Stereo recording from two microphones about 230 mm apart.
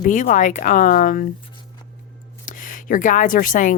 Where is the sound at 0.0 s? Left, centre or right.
Left.